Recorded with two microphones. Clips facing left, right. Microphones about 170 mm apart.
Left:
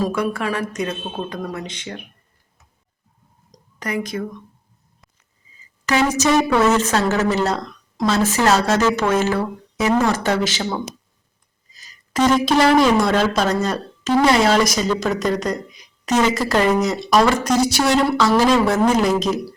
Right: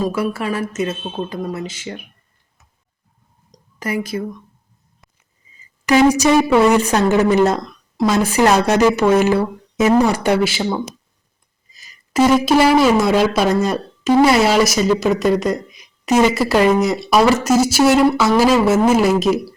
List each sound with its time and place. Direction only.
0.0 s speech: 5° right (ahead or behind)
3.5 s a sound: 5° right (ahead or behind)
5.8 s speech: 15° right (ahead or behind)
12.1 s speech: 10° right (ahead or behind)